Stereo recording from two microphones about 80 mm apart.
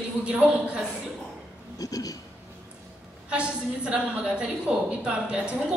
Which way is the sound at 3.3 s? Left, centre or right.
Centre.